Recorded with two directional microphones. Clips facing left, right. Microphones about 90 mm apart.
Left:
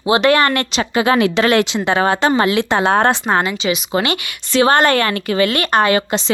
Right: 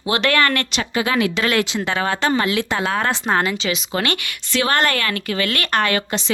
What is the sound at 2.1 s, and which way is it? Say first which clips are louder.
Speech: left 3 dB; 20° left (ahead or behind).